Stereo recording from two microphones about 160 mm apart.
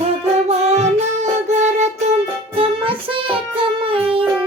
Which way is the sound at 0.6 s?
45° right (ahead or behind).